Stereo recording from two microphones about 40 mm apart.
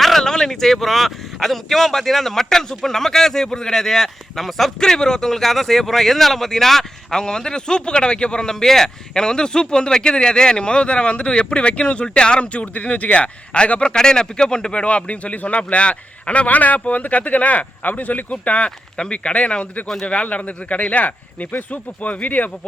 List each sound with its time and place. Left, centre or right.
0.0 s speech: centre
4.8 s speech: centre; by 18.7 s left
18.9 s speech: left